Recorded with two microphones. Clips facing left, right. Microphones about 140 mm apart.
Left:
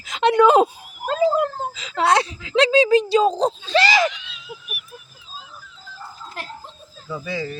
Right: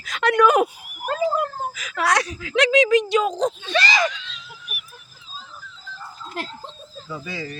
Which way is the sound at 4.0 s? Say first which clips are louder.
Left 2 dB; 20° left (ahead or behind).